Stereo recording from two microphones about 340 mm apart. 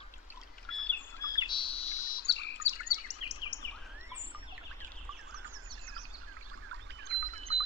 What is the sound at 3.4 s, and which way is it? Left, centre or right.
Bird vocalization, centre.